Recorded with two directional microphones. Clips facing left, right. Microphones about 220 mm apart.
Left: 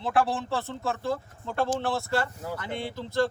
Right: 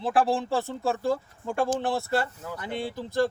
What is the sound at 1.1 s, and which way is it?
Speech, 15° right (ahead or behind).